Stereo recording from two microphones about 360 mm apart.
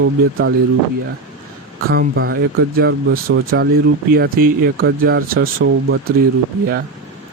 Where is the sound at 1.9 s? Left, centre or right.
Right.